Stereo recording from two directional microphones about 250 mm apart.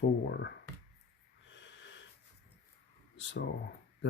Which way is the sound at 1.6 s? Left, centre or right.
Left.